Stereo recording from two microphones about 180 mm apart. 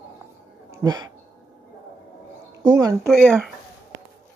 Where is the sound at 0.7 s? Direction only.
20° right (ahead or behind).